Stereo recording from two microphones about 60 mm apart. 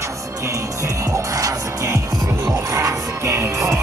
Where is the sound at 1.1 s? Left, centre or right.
Right.